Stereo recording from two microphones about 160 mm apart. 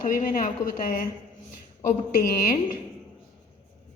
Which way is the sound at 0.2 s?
55° left (ahead or behind).